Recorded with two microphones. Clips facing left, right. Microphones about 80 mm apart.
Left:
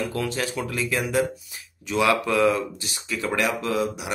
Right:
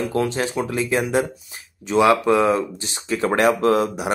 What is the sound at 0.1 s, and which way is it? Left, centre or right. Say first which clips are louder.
Speech: right 5 dB; right.